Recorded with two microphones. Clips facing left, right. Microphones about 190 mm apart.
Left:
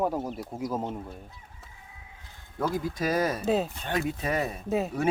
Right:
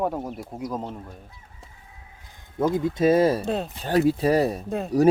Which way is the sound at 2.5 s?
20° right (ahead or behind).